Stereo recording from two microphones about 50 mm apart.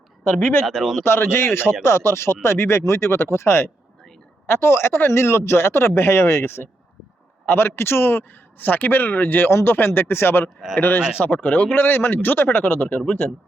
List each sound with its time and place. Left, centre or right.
0.3 s speech: left
0.6 s speech: centre
1.0 s a man's voice: left
5.1 s a man's voice: left
10.8 s speech: left
11.7 s a man's voice: left